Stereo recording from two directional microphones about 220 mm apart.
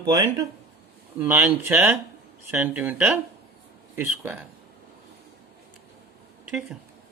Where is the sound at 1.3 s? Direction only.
10° right (ahead or behind).